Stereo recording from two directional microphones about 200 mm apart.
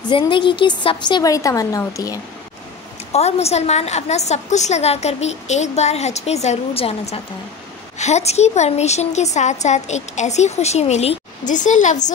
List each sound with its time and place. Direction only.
0.1 s a woman's voice: 25° left (ahead or behind)
3.1 s a woman's voice: 30° left (ahead or behind)